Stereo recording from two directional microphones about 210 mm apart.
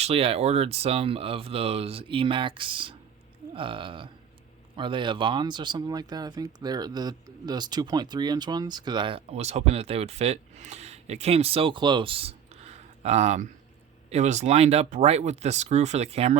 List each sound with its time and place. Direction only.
0.0 s speech: 30° right (ahead or behind)